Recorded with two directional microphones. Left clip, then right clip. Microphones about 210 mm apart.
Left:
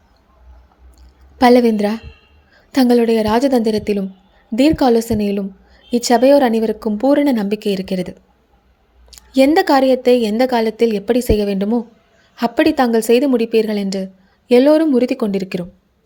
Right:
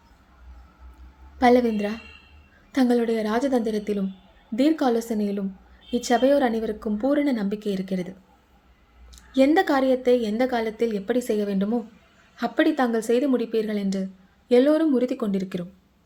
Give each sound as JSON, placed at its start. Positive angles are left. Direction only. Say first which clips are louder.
{"t": 1.4, "sound": "a woman's voice", "louder": "left 8 dB", "side_deg": 40}